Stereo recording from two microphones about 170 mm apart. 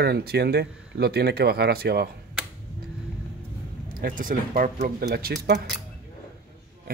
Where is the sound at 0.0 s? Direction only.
70° right (ahead or behind).